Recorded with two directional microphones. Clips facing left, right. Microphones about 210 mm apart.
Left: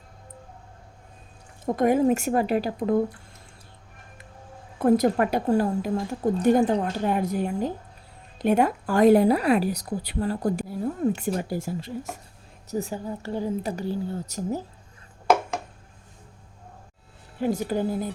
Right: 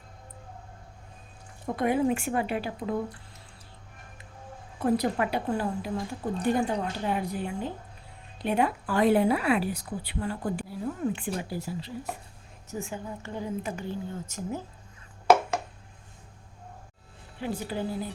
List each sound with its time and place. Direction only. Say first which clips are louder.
1.6 s a woman's voice: left 5 dB; 45° left (ahead or behind)
4.8 s a woman's voice: left 6 dB; 50° left (ahead or behind)
15.3 s a sound: right 1 dB; centre (ahead or behind)
17.4 s a woman's voice: left 7 dB; 45° left (ahead or behind)